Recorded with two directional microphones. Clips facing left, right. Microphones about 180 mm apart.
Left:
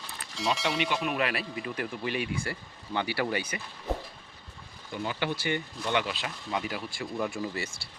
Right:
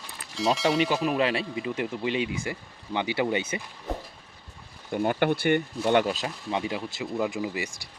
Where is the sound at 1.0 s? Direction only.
30° right (ahead or behind).